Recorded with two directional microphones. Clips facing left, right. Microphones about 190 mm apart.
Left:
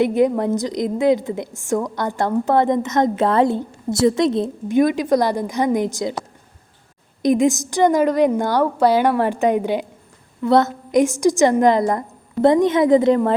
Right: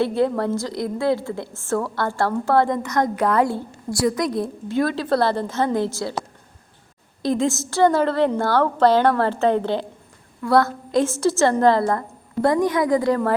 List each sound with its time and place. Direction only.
0.0 s a woman's voice: 15° left (ahead or behind)
7.2 s a woman's voice: 15° left (ahead or behind)